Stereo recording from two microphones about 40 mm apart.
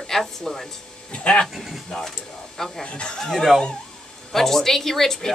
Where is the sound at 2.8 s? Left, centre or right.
Left.